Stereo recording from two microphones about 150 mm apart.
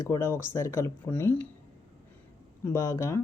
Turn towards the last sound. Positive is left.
turn(degrees=20)  # may be behind; listen again after turning